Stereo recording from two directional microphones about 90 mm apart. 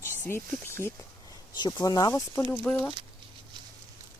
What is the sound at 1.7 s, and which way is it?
Speech, 40° left (ahead or behind).